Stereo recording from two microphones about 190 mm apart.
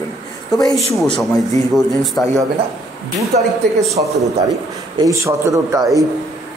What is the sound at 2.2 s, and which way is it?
Speech, 5° left (ahead or behind).